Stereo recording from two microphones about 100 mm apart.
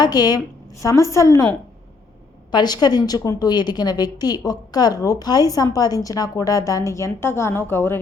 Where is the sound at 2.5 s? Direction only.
45° left (ahead or behind).